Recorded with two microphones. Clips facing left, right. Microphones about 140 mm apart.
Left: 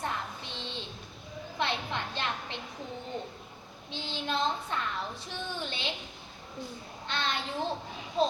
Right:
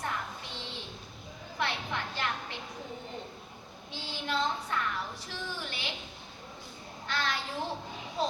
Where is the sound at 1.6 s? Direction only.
25° left (ahead or behind).